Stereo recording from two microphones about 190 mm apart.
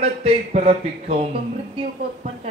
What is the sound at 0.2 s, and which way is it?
A man's voice, 35° right (ahead or behind).